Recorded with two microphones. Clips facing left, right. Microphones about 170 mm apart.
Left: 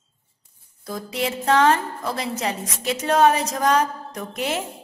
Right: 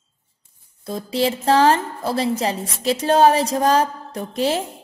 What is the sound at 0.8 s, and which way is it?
A woman's voice, 30° right (ahead or behind).